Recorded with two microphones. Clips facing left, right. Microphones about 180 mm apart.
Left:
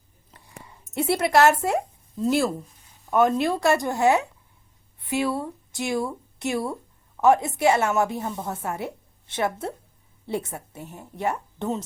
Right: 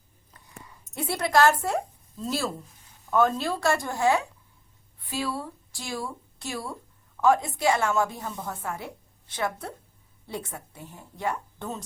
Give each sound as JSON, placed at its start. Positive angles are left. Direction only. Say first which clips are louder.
{"t": 0.9, "sound": "a woman's voice", "louder": "left 3 dB", "side_deg": 25}